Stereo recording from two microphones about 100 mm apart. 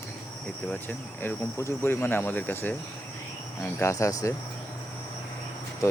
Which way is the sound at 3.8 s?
30° left (ahead or behind).